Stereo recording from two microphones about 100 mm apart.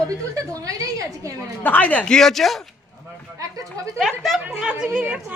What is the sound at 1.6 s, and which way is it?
Speech, 15° left (ahead or behind).